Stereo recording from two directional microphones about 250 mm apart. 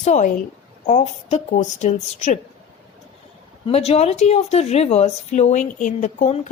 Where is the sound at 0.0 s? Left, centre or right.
Left.